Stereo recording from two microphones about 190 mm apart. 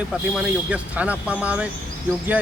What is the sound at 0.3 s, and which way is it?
Speech, 5° right (ahead or behind).